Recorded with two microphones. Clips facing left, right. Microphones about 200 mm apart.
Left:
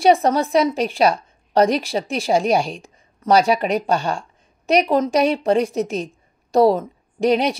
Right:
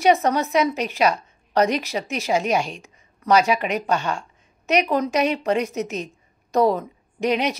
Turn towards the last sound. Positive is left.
turn(degrees=35)  # may be behind; listen again after turning